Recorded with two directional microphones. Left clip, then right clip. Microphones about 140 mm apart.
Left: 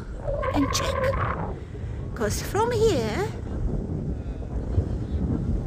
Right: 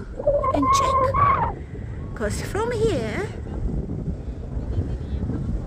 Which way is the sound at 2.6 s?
20° left (ahead or behind).